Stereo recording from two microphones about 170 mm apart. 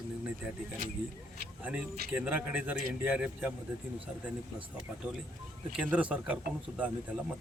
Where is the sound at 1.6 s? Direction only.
5° right (ahead or behind).